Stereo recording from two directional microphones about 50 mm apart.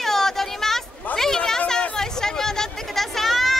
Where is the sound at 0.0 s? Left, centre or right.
Centre.